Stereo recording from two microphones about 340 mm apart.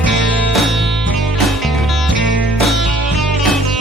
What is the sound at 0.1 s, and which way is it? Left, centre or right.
Music, centre.